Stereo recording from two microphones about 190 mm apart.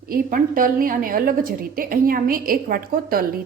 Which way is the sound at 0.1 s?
45° right (ahead or behind).